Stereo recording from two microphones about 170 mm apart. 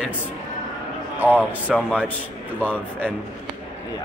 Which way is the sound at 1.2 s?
10° right (ahead or behind).